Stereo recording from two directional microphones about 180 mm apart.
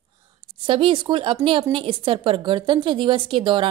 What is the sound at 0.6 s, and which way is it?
A woman's voice, 30° right (ahead or behind).